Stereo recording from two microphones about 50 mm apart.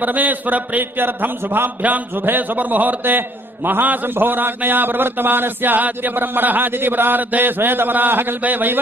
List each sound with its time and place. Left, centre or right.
0.0 s a man's voice: right